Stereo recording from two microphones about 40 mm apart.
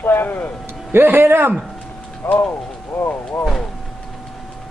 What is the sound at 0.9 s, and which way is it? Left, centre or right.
Speech, right.